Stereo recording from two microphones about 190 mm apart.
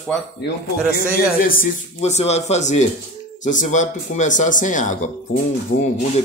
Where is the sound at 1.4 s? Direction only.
45° left (ahead or behind).